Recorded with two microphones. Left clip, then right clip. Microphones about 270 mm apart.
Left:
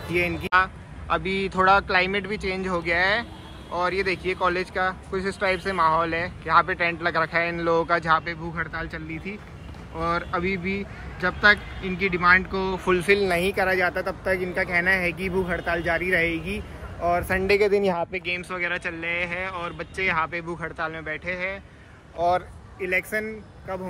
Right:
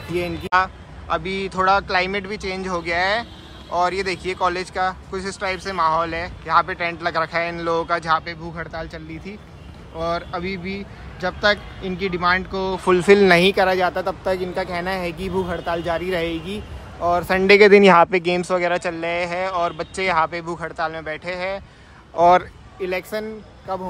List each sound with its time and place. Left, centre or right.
0.1 s speech: centre
15.0 s speech: centre
15.5 s speech: centre
16.1 s speech: centre
17.4 s speech: right
18.2 s speech: centre
22.2 s speech: right
22.8 s speech: centre